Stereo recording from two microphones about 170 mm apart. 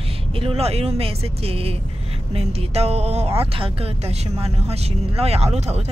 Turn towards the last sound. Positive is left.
turn(degrees=-40)  # may be behind; listen again after turning